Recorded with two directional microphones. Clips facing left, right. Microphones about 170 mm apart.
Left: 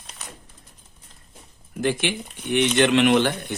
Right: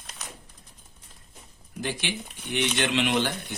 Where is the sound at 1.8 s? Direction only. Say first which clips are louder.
Left 8 dB; 55° left (ahead or behind).